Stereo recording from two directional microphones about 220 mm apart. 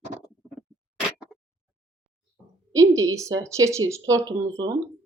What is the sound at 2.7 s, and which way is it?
Speech, 15° right (ahead or behind).